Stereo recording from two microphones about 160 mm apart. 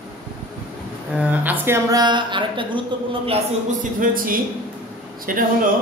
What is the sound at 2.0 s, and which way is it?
A woman's voice, 30° right (ahead or behind).